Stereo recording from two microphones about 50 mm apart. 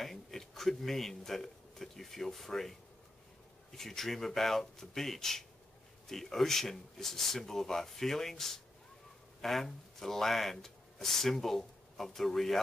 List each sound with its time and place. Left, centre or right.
0.0 s a man's voice: centre
3.7 s speech: centre